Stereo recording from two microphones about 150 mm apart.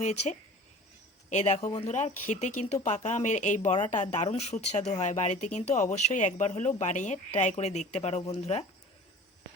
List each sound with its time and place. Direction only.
0.0 s speech: 50° left (ahead or behind)